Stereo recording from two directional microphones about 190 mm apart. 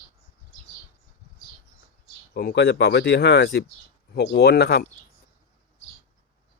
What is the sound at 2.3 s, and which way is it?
Speech, 60° left (ahead or behind).